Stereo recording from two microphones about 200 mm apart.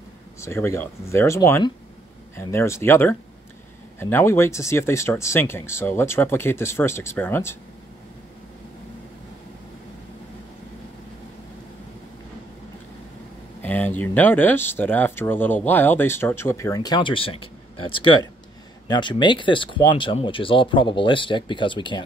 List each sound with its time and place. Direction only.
0.4 s speech: 15° left (ahead or behind)
13.6 s speech: 10° left (ahead or behind)